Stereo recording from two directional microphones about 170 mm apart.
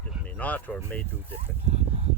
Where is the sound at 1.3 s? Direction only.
35° right (ahead or behind).